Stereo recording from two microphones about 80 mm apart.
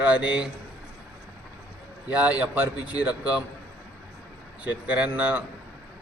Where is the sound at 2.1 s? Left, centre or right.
Centre.